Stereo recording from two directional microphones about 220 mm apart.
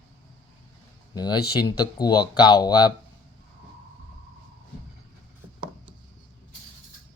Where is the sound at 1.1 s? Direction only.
20° left (ahead or behind).